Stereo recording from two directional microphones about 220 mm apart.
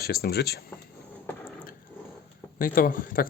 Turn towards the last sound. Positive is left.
turn(degrees=40)  # may be behind; listen again after turning